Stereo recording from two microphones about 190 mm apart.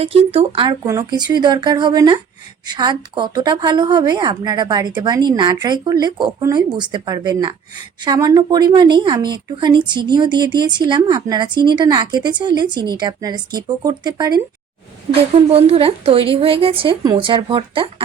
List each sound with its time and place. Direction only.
0.0 s speech: 30° right (ahead or behind)
15.5 s speech: 30° right (ahead or behind)